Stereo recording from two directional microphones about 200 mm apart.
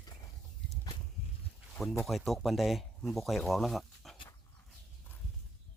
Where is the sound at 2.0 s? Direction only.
Centre (ahead or behind).